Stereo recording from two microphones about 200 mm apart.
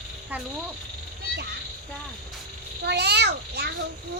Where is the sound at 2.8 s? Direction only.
55° right (ahead or behind).